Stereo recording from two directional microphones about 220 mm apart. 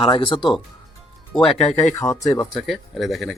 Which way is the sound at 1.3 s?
Centre (ahead or behind).